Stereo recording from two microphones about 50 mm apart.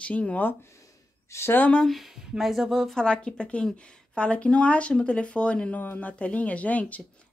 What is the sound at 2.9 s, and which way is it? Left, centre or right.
Speech, centre.